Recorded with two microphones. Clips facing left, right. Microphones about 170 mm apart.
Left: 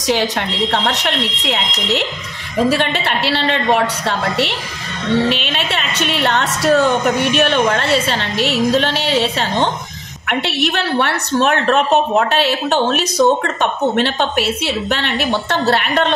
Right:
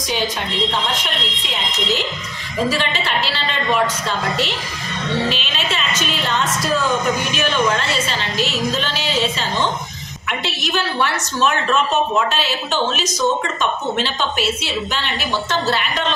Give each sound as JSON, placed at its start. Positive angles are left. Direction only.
{"t": 0.8, "sound": "a woman's voice", "side_deg": 75}
{"t": 5.3, "sound": "a woman's voice", "side_deg": 60}